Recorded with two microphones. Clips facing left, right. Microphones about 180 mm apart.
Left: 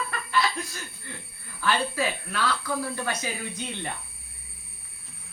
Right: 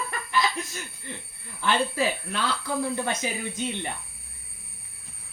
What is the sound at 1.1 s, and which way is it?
Speech, 20° right (ahead or behind).